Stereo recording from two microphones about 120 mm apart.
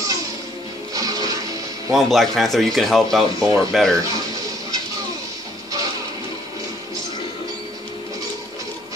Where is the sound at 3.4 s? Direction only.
30° right (ahead or behind).